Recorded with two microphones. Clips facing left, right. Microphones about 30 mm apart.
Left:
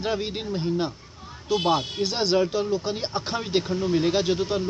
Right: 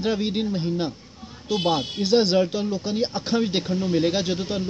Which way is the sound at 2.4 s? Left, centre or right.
Centre.